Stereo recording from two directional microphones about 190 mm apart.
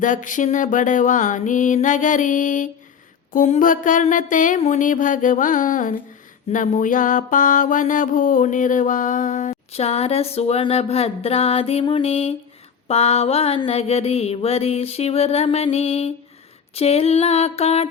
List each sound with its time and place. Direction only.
0.0 s mantra: 45° left (ahead or behind)